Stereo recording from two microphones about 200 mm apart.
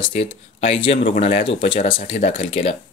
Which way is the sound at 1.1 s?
40° left (ahead or behind).